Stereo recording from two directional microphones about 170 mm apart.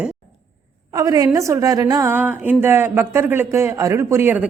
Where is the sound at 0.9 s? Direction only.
20° right (ahead or behind).